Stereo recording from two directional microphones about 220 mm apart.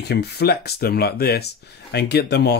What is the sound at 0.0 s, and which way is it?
Speech, 50° left (ahead or behind).